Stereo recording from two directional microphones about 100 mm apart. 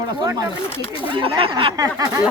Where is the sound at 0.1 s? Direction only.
45° right (ahead or behind).